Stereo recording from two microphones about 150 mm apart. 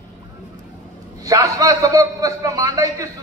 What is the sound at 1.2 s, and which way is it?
A man's voice, 25° right (ahead or behind).